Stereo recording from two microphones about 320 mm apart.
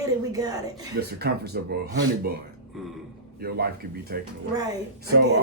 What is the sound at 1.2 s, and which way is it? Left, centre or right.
Speech, right.